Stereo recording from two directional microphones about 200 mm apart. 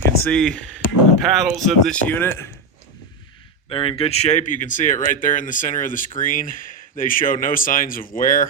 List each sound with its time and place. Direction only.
0.3 s speech: 5° left (ahead or behind)
3.7 s speech: 25° left (ahead or behind); by 8.4 s 45° left (ahead or behind)